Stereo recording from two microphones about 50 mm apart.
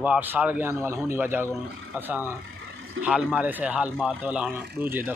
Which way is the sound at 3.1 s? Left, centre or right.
Right.